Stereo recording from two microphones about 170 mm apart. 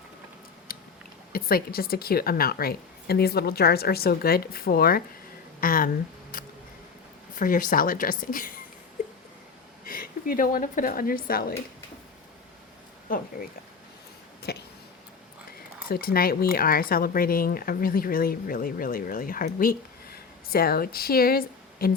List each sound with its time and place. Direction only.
0.7 s chewing: 60° left (ahead or behind)
1.3 s speech: 60° left (ahead or behind)
7.3 s speech: 50° left (ahead or behind)
9.8 s speech: 55° left (ahead or behind)
14.5 s a sound: 70° left (ahead or behind)
15.9 s speech: 60° left (ahead or behind)